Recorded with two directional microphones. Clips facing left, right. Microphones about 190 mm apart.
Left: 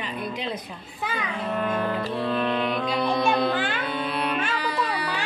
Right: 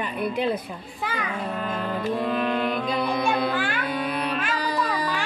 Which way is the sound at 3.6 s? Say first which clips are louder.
Even; 20° left (ahead or behind).